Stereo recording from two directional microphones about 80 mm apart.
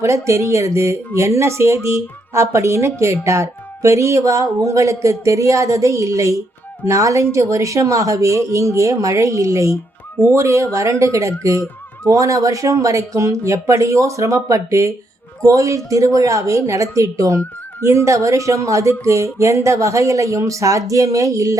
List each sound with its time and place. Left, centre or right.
0.0 s speech: right